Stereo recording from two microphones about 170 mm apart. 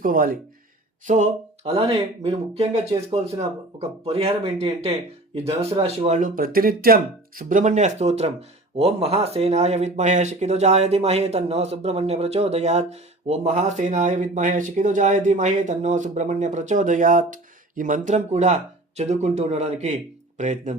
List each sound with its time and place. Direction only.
0.0 s speech: 55° right (ahead or behind)
1.0 s speech: 45° right (ahead or behind)